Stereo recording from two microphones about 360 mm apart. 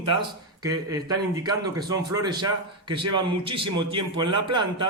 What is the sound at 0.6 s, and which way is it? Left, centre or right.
Speech, centre.